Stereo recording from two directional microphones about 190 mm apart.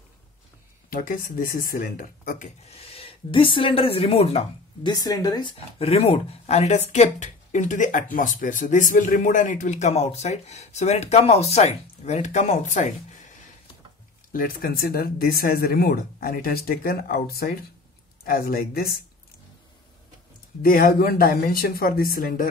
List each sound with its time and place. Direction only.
0.8 s speech: 50° left (ahead or behind); by 4.9 s 30° left (ahead or behind)
4.9 s speech: 20° left (ahead or behind); by 13.3 s 40° left (ahead or behind)
14.3 s speech: 50° left (ahead or behind)
20.6 s speech: 50° left (ahead or behind)